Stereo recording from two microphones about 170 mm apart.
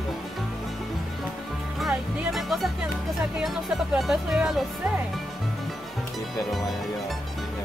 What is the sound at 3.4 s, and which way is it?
Speech, centre (ahead or behind).